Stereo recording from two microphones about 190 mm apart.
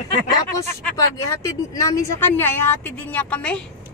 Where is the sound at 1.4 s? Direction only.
15° left (ahead or behind).